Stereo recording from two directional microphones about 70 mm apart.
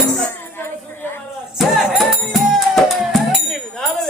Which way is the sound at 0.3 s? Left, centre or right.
Left.